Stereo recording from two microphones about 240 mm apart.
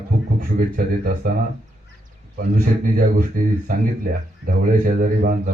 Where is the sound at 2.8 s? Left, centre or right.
Right.